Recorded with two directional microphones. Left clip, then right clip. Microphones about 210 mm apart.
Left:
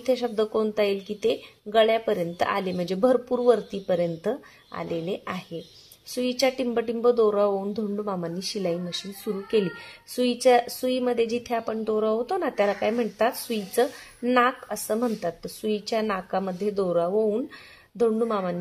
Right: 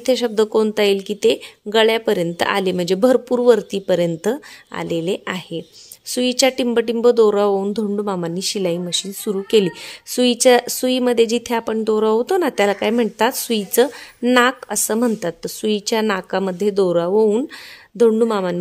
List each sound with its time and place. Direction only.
0.0 s speech: 50° right (ahead or behind)